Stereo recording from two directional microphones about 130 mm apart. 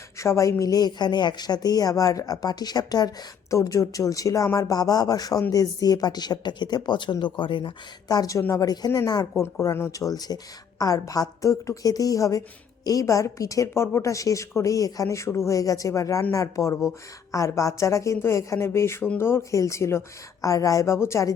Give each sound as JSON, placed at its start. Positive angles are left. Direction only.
{"t": 0.2, "sound": "a woman's voice", "side_deg": 25}